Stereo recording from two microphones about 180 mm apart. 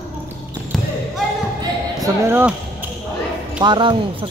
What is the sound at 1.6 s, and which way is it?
Basketball bounce, 15° right (ahead or behind).